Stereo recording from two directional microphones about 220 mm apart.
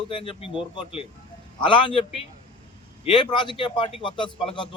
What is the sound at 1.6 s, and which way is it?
Speech, 20° left (ahead or behind).